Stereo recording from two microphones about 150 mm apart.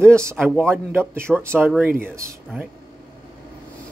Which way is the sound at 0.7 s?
15° right (ahead or behind).